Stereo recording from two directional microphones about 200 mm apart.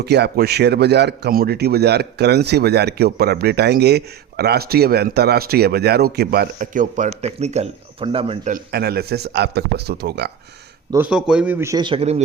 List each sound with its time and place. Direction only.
0.0 s a man's voice: 55° right (ahead or behind); by 8.5 s 30° right (ahead or behind)
8.7 s speech: 50° right (ahead or behind)
10.9 s a man's voice: 5° right (ahead or behind); by 12.2 s 30° right (ahead or behind)